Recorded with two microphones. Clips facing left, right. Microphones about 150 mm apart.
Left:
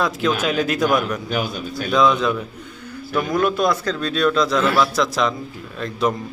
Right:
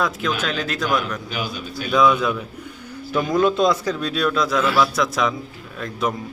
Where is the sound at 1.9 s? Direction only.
5° right (ahead or behind).